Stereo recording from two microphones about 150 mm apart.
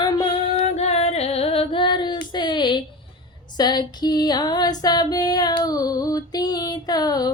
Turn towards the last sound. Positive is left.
turn(degrees=25)  # may be behind; listen again after turning